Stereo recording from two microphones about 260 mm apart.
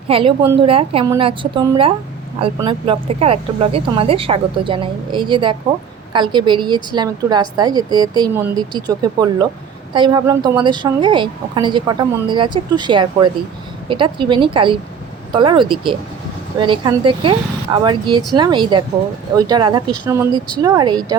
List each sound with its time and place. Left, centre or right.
0.1 s a woman's voice: centre